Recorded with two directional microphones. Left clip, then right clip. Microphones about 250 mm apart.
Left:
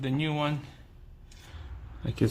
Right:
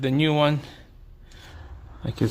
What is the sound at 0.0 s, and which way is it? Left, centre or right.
Speech, right.